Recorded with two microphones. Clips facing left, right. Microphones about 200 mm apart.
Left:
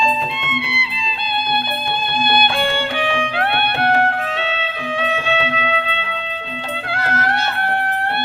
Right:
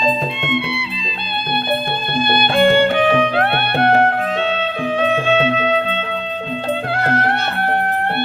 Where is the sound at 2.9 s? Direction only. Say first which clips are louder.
Right 6 dB; 40° right (ahead or behind).